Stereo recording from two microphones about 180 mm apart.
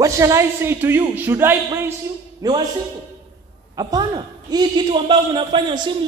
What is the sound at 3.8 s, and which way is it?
A man's voice, 20° right (ahead or behind).